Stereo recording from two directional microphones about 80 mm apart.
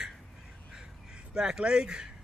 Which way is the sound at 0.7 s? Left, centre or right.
Centre.